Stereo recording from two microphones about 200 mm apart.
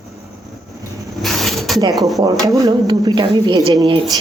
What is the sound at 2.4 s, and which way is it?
A woman's voice, 20° right (ahead or behind).